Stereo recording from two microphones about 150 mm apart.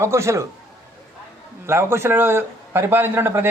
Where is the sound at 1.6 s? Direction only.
15° right (ahead or behind).